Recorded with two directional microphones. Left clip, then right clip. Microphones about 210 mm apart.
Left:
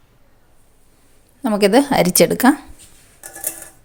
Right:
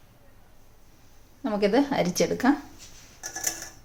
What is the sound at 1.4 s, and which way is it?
A woman's voice, 45° left (ahead or behind).